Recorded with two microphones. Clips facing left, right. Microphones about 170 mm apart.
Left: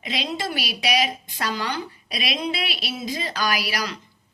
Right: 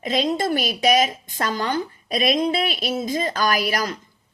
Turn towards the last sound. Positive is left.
turn(degrees=-50)  # may be behind; listen again after turning